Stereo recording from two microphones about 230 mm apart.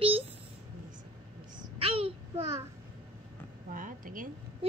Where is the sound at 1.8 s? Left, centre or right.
Right.